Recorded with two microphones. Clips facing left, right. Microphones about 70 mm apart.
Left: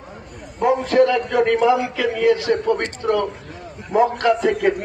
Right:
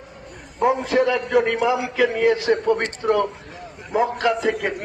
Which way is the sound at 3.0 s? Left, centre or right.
Right.